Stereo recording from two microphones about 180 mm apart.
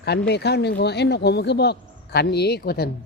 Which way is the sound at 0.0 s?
65° left (ahead or behind).